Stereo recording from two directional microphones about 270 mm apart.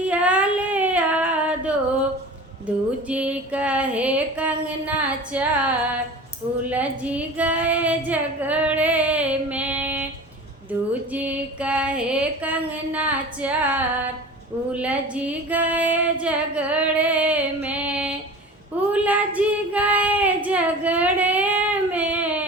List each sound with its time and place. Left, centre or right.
0.0 s child singing: centre
3.1 s music: centre
6.7 s child singing: centre
10.7 s female singing: centre
11.1 s music: centre
16.2 s female singing: centre
18.9 s child singing: centre